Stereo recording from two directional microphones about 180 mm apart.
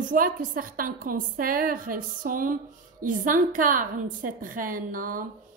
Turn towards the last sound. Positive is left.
turn(degrees=-50)  # may be behind; listen again after turning